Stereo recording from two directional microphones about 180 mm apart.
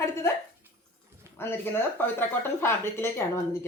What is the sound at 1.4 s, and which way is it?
Speech, 15° left (ahead or behind).